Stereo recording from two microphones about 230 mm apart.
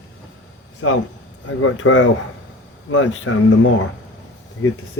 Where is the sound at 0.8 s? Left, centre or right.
Left.